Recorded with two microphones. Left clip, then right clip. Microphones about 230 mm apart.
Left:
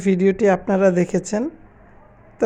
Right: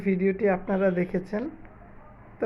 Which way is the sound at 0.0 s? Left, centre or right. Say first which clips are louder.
Left 8 dB; left.